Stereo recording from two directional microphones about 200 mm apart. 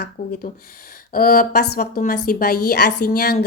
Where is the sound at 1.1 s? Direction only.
45° left (ahead or behind).